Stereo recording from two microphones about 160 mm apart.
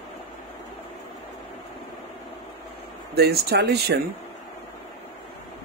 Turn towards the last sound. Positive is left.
turn(degrees=-85)